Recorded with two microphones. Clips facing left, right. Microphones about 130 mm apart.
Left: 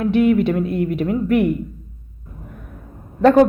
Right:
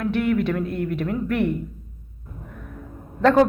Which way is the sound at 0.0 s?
20° left (ahead or behind).